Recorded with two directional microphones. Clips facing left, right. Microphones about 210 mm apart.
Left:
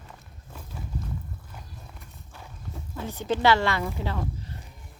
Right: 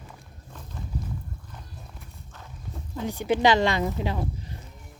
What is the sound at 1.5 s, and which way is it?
Walk, centre (ahead or behind).